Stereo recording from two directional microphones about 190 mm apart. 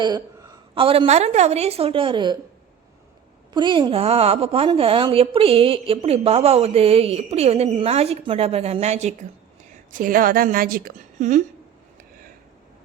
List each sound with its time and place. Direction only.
0.0 s a woman's voice: 20° right (ahead or behind)
3.5 s a woman's voice: 25° right (ahead or behind)
9.9 s a woman's voice: 45° right (ahead or behind)